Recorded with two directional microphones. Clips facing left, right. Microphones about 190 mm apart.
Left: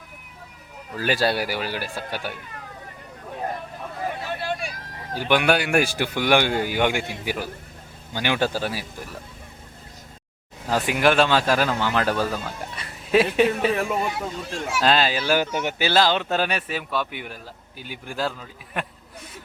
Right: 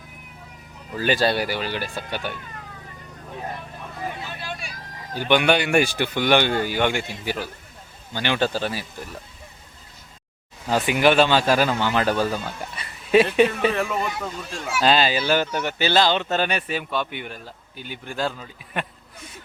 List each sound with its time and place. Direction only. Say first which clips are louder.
0.9 s speech: right 1 dB; 5° left (ahead or behind)
4.4 s vehicle: left 6 dB; 55° left (ahead or behind)
5.1 s speech: right 1 dB; 5° left (ahead or behind)
10.7 s speech: right 2 dB; centre (ahead or behind)
15.5 s speech: even; 15° left (ahead or behind)
15.9 s speech: even; 5° left (ahead or behind)